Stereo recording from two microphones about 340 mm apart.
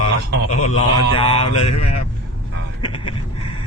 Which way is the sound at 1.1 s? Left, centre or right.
Centre.